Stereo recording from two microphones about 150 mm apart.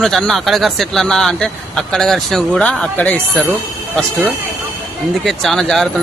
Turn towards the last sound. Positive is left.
turn(degrees=0)  # may be behind; listen again after turning